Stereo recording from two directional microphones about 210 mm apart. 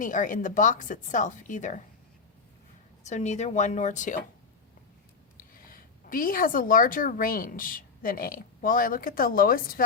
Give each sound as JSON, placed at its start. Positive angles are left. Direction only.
{"t": 0.0, "sound": "a woman's voice", "side_deg": 40}
{"t": 3.1, "sound": "a woman's voice", "side_deg": 35}
{"t": 5.6, "sound": "a woman's voice", "side_deg": 40}